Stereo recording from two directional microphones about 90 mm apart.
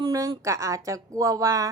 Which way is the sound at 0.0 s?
45° right (ahead or behind).